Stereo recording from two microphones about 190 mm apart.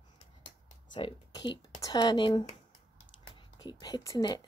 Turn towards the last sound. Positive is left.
turn(degrees=20)  # may be behind; listen again after turning